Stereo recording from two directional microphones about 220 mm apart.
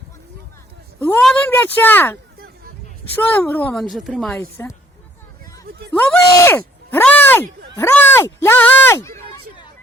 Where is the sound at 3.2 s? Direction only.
10° left (ahead or behind).